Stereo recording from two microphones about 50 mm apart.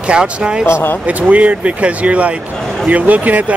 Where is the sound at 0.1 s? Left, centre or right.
Centre.